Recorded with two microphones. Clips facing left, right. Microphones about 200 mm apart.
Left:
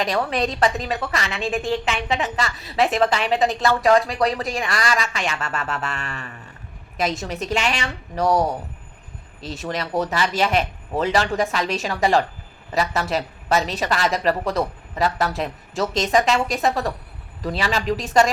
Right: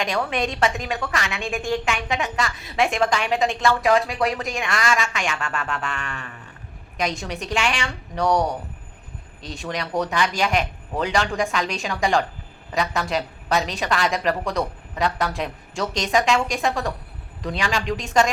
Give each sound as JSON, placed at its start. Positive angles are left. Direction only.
{"t": 0.0, "sound": "a woman's voice", "side_deg": 0}
{"t": 4.4, "sound": "speech", "side_deg": 40}
{"t": 6.9, "sound": "a woman's voice", "side_deg": 5}
{"t": 7.4, "sound": "speech", "side_deg": 40}
{"t": 8.1, "sound": "a woman's voice", "side_deg": 5}